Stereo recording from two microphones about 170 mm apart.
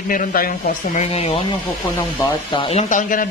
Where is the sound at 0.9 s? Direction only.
35° left (ahead or behind).